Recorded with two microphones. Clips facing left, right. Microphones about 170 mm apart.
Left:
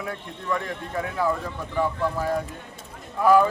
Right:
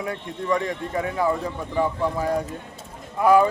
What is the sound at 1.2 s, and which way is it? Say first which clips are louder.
Speech: right 1 dB; 15° right (ahead or behind).